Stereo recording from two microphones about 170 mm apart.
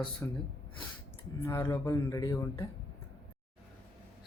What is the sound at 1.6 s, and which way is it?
Speech, 20° left (ahead or behind).